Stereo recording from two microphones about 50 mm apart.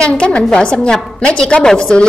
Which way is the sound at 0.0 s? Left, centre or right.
Left.